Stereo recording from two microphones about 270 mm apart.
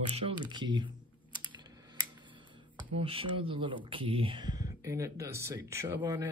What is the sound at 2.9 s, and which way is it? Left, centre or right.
Speech, right.